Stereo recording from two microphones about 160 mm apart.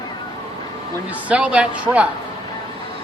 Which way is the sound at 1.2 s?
5° right (ahead or behind).